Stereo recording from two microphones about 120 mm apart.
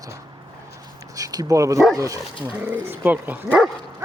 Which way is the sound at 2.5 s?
10° right (ahead or behind).